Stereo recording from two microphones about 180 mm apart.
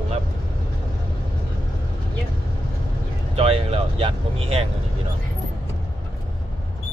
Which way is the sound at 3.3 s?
35° right (ahead or behind).